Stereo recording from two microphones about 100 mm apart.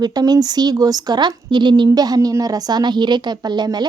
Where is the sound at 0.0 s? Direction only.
40° right (ahead or behind).